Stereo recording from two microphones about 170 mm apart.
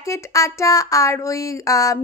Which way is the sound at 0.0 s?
20° left (ahead or behind).